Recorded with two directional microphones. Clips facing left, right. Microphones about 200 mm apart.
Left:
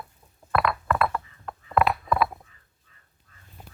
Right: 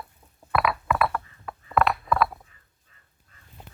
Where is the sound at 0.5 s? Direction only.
5° right (ahead or behind).